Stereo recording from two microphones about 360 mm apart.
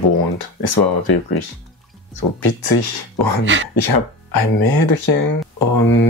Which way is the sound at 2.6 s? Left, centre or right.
Left.